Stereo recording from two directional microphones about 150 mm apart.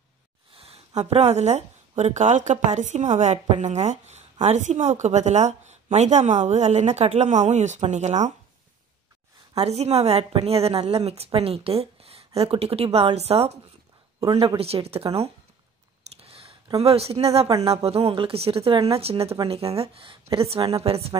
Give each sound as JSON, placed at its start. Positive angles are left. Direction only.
{"t": 0.6, "sound": "speech", "side_deg": -45}
{"t": 9.6, "sound": "a woman's voice", "side_deg": -45}
{"t": 14.6, "sound": "a woman's voice", "side_deg": -40}
{"t": 16.0, "sound": "a sound", "side_deg": -40}
{"t": 17.6, "sound": "a woman's voice", "side_deg": -45}